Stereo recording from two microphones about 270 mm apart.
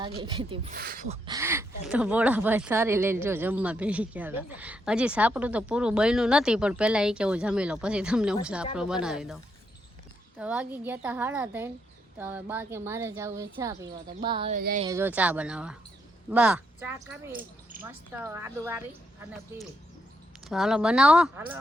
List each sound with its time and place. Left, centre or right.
0.0 s a woman's voice: centre
0.7 s a woman's voice: right
14.6 s speech: right
14.8 s a woman's voice: centre
20.5 s speech: centre